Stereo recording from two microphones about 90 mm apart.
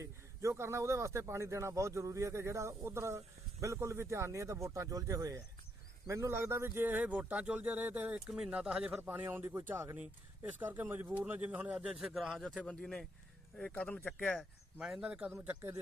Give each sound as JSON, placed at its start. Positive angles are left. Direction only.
{"t": 0.0, "sound": "speech", "side_deg": -30}
{"t": 8.3, "sound": "speech", "side_deg": -5}
{"t": 9.0, "sound": "speech", "side_deg": -25}
{"t": 14.8, "sound": "speech", "side_deg": -5}